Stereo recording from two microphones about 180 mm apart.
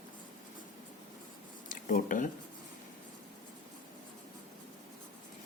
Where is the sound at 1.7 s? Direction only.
45° left (ahead or behind).